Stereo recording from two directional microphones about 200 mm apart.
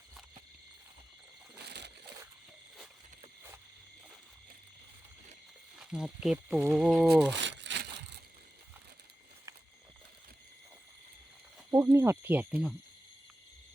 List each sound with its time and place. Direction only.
1.6 s a sound: 55° right (ahead or behind)
5.8 s speech: 5° right (ahead or behind)
7.3 s crumpling: 65° right (ahead or behind)
11.7 s speech: 15° right (ahead or behind)